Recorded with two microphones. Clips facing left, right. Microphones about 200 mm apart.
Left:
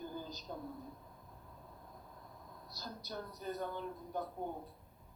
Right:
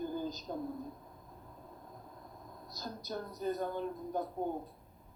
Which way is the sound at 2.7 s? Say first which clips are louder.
Right 5 dB; 45° right (ahead or behind).